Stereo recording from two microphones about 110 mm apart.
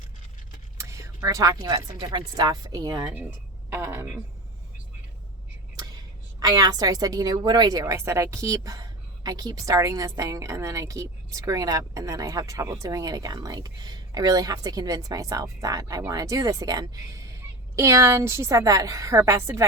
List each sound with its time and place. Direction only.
0.8 s speech: 25° right (ahead or behind)
3.2 s speech: 20° right (ahead or behind)
5.7 s a sound: 35° right (ahead or behind)
6.4 s a woman's voice: 35° right (ahead or behind)